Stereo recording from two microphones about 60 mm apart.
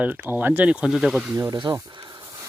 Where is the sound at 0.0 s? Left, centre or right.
Right.